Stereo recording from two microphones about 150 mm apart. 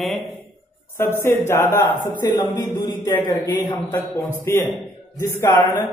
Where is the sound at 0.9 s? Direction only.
15° left (ahead or behind).